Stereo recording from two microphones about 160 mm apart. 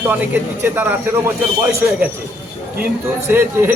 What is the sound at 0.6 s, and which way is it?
Speech, 15° right (ahead or behind).